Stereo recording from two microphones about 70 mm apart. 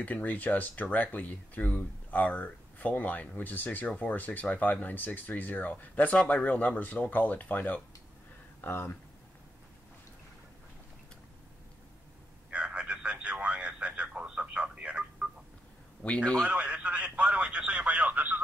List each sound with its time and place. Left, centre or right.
0.0 s speech: left
12.4 s a sound: centre
16.0 s a man's voice: centre
16.4 s speech: centre